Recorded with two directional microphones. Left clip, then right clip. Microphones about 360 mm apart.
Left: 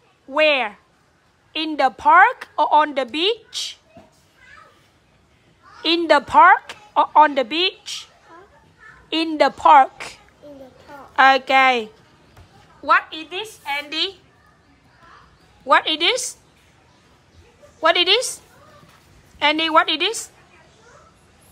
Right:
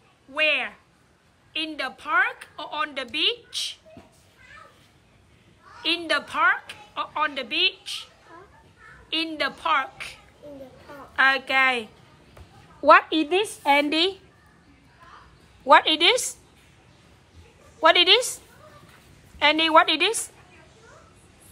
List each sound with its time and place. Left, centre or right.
0.3 s a woman's voice: centre
5.8 s a woman's voice: centre
9.1 s a woman's voice: centre
12.8 s a woman's voice: centre
15.6 s a woman's voice: centre
17.7 s a woman's voice: centre